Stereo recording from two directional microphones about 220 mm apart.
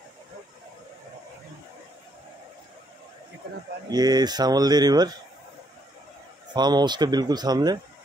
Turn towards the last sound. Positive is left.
turn(degrees=-20)  # may be behind; listen again after turning